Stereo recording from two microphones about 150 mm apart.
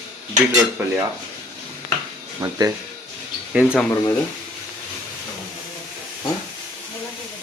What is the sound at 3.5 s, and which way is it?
Speech, 5° right (ahead or behind).